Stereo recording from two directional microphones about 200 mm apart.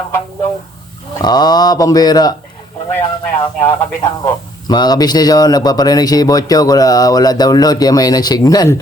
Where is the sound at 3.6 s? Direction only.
15° left (ahead or behind).